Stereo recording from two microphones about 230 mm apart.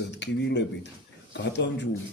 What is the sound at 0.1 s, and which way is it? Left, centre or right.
Speech, left.